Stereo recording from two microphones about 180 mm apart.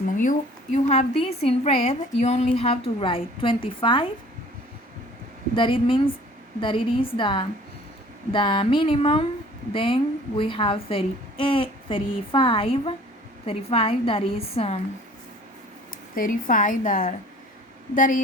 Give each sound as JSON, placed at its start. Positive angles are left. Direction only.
{"t": 0.2, "sound": "a woman's voice", "side_deg": 45}
{"t": 5.5, "sound": "a woman's voice", "side_deg": 30}
{"t": 16.1, "sound": "a woman's voice", "side_deg": 50}